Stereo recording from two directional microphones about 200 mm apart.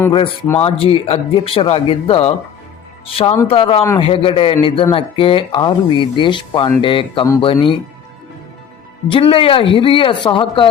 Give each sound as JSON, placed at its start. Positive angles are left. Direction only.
{"t": 0.6, "sound": "speech", "side_deg": 25}
{"t": 3.4, "sound": "speech", "side_deg": 25}
{"t": 9.0, "sound": "speech", "side_deg": 25}